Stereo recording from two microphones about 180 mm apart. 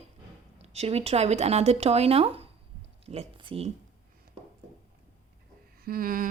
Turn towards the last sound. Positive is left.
turn(degrees=-50)  # may be behind; listen again after turning